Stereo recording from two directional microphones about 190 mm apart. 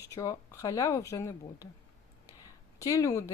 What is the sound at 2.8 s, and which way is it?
Speech, 15° left (ahead or behind).